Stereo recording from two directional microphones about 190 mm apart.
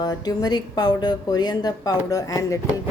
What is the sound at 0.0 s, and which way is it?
A woman's voice, 20° left (ahead or behind).